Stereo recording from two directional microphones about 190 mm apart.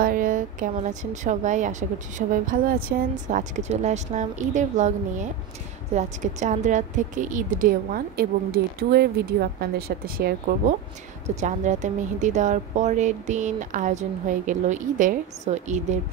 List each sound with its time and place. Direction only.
0.0 s a woman's voice: 45° right (ahead or behind)
11.2 s speech: 40° right (ahead or behind)